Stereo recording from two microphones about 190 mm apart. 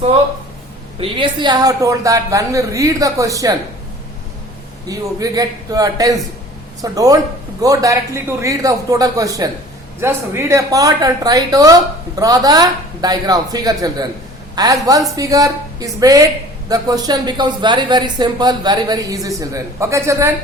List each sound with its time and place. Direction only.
0.9 s a woman's voice: 25° right (ahead or behind)
4.9 s a woman's voice: 20° right (ahead or behind)